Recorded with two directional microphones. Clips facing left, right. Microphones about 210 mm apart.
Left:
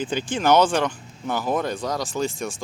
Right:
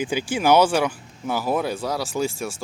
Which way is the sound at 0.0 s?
10° right (ahead or behind).